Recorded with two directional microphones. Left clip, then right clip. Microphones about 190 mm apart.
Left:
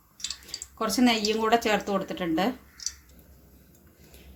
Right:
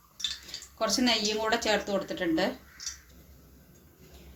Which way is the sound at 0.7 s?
40° left (ahead or behind).